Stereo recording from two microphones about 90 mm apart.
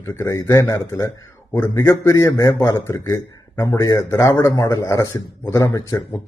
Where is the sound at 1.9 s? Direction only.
35° left (ahead or behind).